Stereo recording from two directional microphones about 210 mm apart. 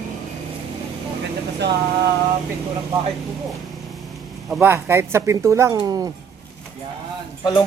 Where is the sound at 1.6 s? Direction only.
55° right (ahead or behind).